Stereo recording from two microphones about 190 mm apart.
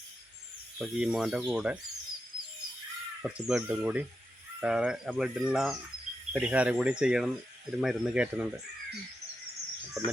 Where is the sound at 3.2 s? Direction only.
5° right (ahead or behind).